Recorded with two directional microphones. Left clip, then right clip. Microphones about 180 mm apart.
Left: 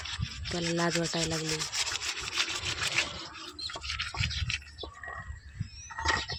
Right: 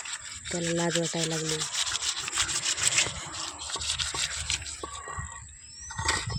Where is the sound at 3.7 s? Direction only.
20° left (ahead or behind).